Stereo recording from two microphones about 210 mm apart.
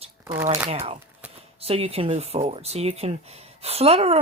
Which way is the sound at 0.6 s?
30° right (ahead or behind).